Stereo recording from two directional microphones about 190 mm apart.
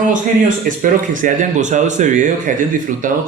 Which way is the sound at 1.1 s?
40° right (ahead or behind).